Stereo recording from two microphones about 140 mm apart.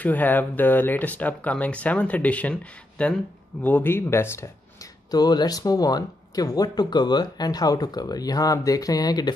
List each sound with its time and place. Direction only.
0.0 s speech: 10° left (ahead or behind)
5.1 s speech: 30° left (ahead or behind)